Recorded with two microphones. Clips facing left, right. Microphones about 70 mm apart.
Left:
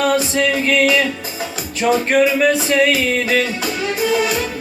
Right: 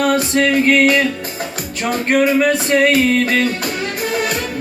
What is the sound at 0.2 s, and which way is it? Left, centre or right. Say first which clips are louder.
Music: right 3 dB; right.